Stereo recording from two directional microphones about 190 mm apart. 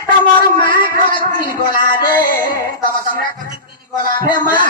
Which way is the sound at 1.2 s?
25° left (ahead or behind).